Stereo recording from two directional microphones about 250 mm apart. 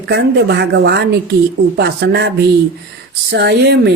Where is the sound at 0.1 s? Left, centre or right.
Right.